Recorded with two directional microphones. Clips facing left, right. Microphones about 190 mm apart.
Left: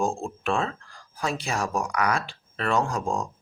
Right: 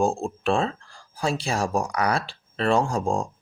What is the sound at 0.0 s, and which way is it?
Speech, 30° right (ahead or behind).